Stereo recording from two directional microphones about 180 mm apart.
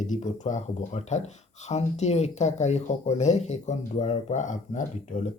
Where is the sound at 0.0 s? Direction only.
40° left (ahead or behind).